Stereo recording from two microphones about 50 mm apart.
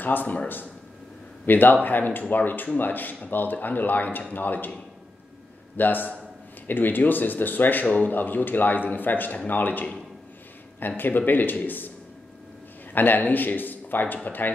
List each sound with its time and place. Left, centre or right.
0.0 s a man's voice: left
1.4 s a man's voice: left
5.8 s a man's voice: left
11.0 s a man's voice: left
12.9 s a man's voice: left